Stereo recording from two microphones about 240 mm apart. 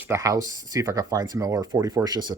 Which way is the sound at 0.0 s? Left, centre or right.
Centre.